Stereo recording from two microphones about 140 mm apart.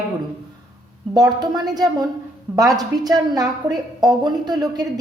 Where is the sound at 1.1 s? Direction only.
30° right (ahead or behind).